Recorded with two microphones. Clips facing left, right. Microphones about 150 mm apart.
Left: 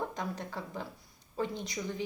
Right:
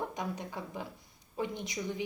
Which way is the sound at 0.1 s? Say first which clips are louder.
Even; 15° right (ahead or behind).